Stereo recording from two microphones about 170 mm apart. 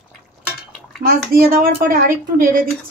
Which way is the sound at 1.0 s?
60° right (ahead or behind).